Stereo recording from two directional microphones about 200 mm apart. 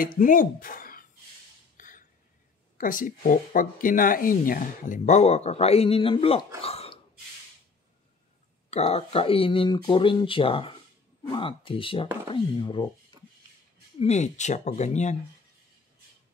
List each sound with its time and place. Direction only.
0.0 s speech: 45° left (ahead or behind)
1.8 s a sound: 40° left (ahead or behind)
2.8 s speech: 45° left (ahead or behind)
6.6 s a sound: 30° left (ahead or behind)
8.6 s speech: 30° left (ahead or behind)
13.9 s speech: 35° left (ahead or behind)